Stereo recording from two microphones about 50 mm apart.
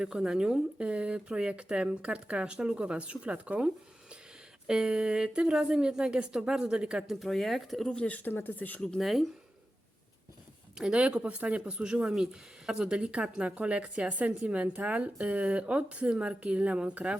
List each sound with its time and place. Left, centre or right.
0.0 s speech: centre
4.6 s a woman's voice: centre
7.1 s speech: centre
8.0 s speech: left
8.3 s speech: left
9.0 s speech: centre
10.8 s speech: centre